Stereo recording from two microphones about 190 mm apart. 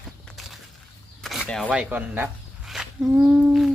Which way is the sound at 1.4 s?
5° left (ahead or behind).